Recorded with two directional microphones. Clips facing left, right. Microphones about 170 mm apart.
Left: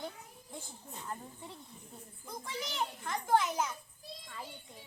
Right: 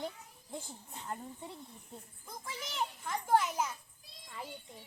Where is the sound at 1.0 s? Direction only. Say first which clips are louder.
Right 2 dB; 20° right (ahead or behind).